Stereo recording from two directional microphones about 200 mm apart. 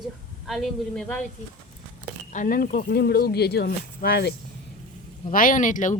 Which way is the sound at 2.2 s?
40° left (ahead or behind).